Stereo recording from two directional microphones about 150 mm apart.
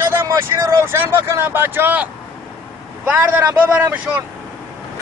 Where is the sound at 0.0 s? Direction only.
20° right (ahead or behind).